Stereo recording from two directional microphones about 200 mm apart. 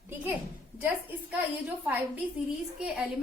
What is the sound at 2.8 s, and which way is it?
Speech, 5° right (ahead or behind).